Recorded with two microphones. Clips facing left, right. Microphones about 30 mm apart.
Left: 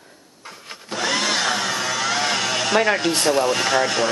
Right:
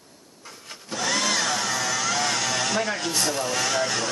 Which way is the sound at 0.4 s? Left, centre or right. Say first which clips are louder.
Left 4 dB; left.